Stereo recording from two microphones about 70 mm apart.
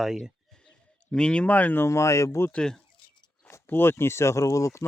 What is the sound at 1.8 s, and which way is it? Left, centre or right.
Speech, left.